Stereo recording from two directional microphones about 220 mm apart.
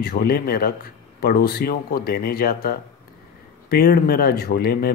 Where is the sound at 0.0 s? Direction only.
40° left (ahead or behind).